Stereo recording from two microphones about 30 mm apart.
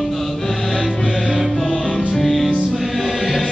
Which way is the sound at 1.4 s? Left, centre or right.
Centre.